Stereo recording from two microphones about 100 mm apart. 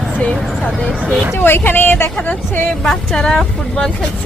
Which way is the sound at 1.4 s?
20° left (ahead or behind).